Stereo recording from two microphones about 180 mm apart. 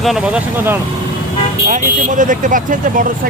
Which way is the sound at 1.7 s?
45° right (ahead or behind).